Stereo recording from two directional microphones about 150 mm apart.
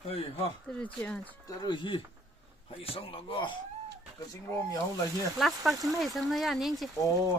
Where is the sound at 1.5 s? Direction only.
30° left (ahead or behind).